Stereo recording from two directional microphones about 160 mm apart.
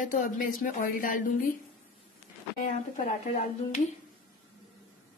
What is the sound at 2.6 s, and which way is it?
A woman's voice, 50° left (ahead or behind).